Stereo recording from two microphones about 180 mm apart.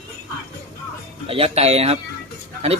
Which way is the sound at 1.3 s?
35° right (ahead or behind).